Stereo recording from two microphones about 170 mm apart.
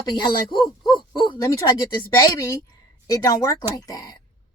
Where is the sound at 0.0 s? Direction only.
25° left (ahead or behind).